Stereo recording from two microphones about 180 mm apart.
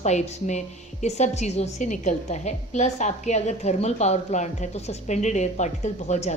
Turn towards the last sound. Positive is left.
turn(degrees=40)  # may be behind; listen again after turning